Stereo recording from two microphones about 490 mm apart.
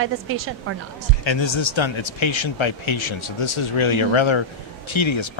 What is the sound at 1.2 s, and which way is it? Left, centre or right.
Speech, left.